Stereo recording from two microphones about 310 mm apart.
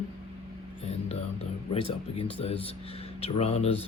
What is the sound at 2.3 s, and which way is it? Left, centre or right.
Speech, centre.